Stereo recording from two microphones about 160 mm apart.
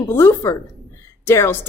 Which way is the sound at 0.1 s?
15° left (ahead or behind).